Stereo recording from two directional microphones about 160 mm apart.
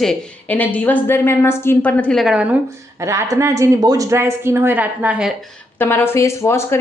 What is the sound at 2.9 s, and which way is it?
Speech, 20° right (ahead or behind).